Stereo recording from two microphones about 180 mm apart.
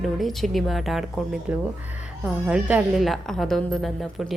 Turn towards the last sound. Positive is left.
turn(degrees=5)  # may be behind; listen again after turning